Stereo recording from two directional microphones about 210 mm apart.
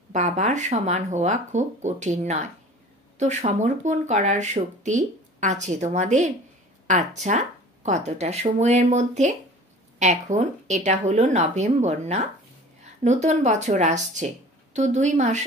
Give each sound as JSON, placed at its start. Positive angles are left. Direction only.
{"t": 0.1, "sound": "speech", "side_deg": -35}